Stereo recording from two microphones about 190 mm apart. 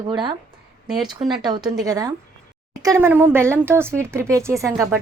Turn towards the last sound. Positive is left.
turn(degrees=-15)  # may be behind; listen again after turning